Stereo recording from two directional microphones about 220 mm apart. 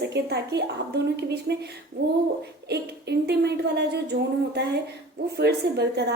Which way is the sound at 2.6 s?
45° right (ahead or behind).